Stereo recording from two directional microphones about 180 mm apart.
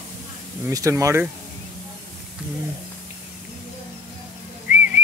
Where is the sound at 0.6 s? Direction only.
15° right (ahead or behind).